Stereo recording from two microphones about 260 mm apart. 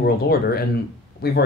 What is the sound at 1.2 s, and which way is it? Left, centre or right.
Speech, left.